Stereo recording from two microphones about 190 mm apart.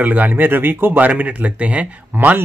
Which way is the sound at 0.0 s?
10° right (ahead or behind).